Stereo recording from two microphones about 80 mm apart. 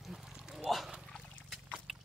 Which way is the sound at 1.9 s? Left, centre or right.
Centre.